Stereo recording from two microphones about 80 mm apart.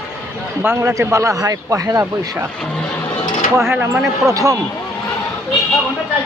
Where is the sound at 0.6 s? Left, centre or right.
Right.